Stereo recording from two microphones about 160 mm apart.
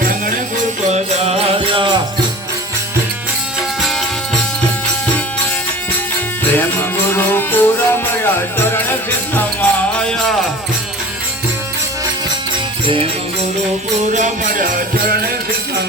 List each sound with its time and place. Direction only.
0.9 s music: 45° right (ahead or behind)
6.5 s music: 10° left (ahead or behind)
14.1 s music: 50° right (ahead or behind)